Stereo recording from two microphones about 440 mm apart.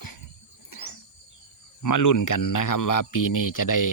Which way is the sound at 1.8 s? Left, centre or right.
Left.